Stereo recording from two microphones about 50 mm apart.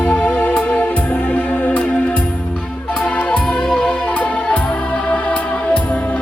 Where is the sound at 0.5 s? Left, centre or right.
Centre.